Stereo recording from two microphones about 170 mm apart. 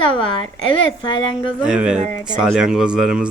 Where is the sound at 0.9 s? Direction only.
30° left (ahead or behind).